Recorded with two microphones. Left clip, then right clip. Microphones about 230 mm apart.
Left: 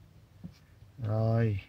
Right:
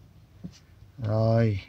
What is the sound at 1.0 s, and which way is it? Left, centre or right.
Speech, centre.